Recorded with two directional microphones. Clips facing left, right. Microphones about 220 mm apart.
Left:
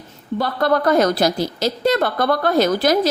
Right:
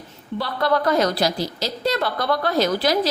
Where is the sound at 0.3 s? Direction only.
50° left (ahead or behind).